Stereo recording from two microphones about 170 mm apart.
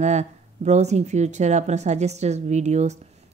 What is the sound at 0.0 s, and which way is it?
A woman's voice, 40° right (ahead or behind).